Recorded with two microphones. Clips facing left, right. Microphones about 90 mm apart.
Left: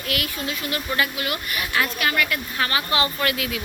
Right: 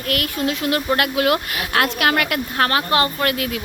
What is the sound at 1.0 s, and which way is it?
Speech, 90° right.